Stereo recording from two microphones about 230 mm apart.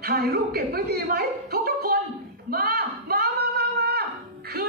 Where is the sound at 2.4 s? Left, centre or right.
Right.